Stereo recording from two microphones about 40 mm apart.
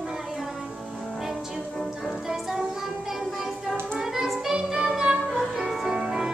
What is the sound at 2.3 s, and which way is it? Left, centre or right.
Music, centre.